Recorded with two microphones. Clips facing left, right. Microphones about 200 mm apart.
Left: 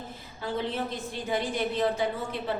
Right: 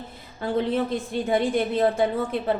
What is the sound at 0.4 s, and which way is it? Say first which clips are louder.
A woman's voice: right 7 dB; 55° right (ahead or behind).